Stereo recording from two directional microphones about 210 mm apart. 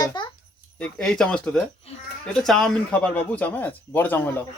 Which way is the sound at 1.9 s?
30° left (ahead or behind).